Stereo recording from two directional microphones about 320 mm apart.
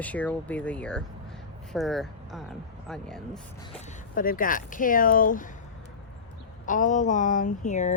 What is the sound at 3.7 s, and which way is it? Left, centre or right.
Speech, left.